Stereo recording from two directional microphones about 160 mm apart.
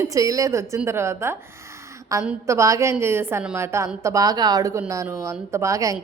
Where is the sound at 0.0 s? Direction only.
20° right (ahead or behind).